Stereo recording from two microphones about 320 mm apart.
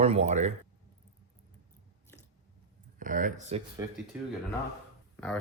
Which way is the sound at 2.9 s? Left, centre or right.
Right.